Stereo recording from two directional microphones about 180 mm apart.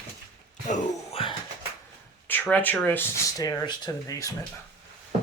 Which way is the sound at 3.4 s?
20° left (ahead or behind).